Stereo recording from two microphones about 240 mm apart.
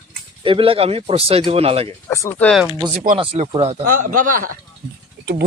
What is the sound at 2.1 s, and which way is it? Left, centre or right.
Speech, centre.